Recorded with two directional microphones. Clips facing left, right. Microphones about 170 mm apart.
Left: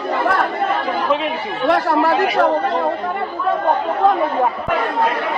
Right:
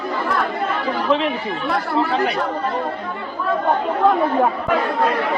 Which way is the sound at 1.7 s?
80° left.